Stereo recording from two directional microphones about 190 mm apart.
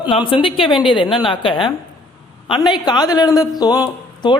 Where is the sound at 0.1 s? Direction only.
25° left (ahead or behind).